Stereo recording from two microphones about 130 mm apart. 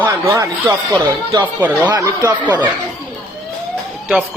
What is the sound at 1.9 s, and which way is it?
Speech, 25° right (ahead or behind).